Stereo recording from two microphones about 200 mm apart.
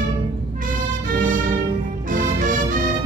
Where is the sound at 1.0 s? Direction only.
40° right (ahead or behind).